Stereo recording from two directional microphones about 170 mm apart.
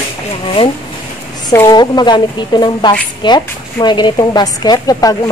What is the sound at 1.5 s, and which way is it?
A woman's voice, 20° left (ahead or behind).